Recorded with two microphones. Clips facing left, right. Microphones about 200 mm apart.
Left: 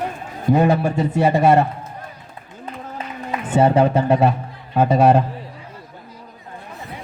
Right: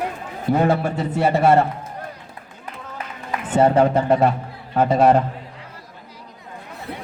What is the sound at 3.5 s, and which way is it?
A man's voice, 15° left (ahead or behind).